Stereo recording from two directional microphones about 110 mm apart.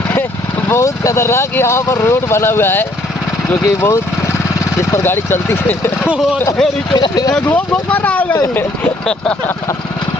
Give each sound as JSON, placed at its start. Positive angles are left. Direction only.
{"t": 0.7, "sound": "speech", "side_deg": 25}
{"t": 6.9, "sound": "speech", "side_deg": 40}
{"t": 7.3, "sound": "speech", "side_deg": 15}